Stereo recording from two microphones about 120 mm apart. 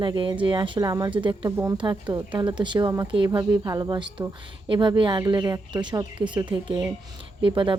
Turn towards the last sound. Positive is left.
turn(degrees=-45)  # may be behind; listen again after turning